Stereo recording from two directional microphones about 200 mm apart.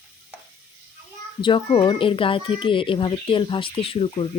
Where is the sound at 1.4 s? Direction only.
25° left (ahead or behind).